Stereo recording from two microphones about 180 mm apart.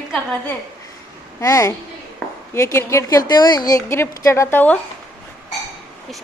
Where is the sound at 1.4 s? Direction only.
15° left (ahead or behind).